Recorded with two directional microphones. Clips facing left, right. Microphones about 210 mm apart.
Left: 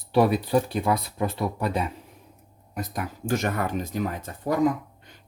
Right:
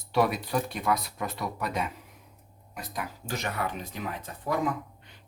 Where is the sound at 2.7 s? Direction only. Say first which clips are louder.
Left 5 dB; 50° left (ahead or behind).